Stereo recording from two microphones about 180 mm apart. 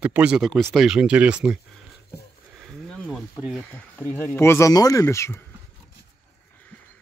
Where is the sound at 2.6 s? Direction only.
Centre (ahead or behind).